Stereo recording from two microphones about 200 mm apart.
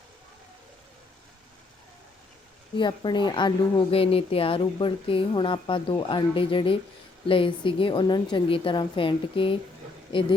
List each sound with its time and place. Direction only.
2.7 s speech: 25° left (ahead or behind)